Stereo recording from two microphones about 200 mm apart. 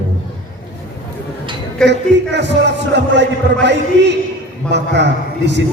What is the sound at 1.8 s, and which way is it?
A man's voice, 60° right (ahead or behind).